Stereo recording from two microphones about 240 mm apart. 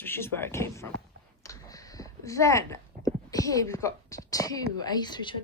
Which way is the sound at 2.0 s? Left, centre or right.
Centre.